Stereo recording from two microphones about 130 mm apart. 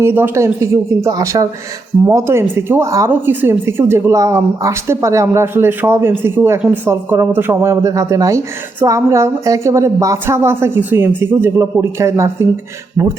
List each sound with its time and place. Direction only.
0.0 s speech: 20° right (ahead or behind)